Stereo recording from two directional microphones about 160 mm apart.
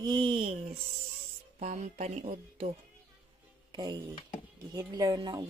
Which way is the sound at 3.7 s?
25° right (ahead or behind).